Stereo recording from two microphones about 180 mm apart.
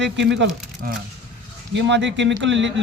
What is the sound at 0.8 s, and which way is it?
Speech, 55° right (ahead or behind).